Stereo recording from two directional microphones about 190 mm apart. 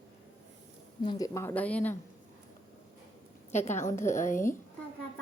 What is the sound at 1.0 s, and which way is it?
Speech, 20° left (ahead or behind).